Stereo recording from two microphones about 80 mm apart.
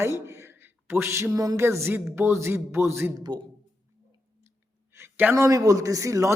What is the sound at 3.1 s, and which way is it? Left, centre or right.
Speech, right.